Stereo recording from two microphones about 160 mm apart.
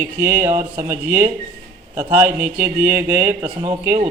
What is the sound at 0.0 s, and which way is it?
A man's voice, 15° right (ahead or behind).